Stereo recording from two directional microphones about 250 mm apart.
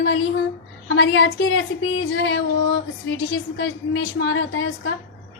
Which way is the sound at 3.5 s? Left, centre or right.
Left.